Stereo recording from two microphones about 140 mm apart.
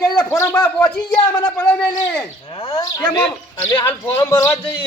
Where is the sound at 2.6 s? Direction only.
35° left (ahead or behind).